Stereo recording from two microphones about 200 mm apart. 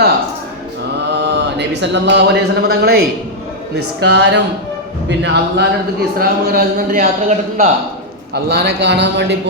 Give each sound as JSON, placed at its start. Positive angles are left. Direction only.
{"t": 1.2, "sound": "a man's voice", "side_deg": -60}
{"t": 8.3, "sound": "a man's voice", "side_deg": -55}